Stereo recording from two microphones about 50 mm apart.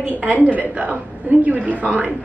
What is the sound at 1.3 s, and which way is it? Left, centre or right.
Speech, right.